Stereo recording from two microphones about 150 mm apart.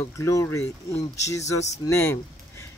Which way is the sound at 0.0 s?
20° left (ahead or behind).